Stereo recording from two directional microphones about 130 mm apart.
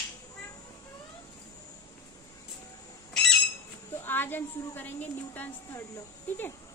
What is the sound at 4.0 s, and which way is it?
A woman's voice, 15° left (ahead or behind).